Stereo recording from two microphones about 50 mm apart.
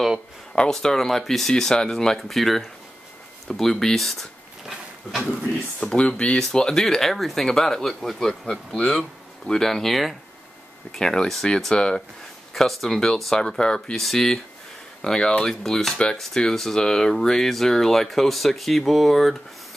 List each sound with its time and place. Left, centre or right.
0.6 s speech: centre
5.9 s speech: left
12.5 s speech: centre